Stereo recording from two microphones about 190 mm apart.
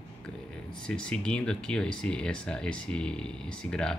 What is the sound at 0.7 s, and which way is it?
Speech, 5° left (ahead or behind).